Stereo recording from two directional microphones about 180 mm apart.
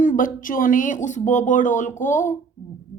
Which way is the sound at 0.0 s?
50° left (ahead or behind).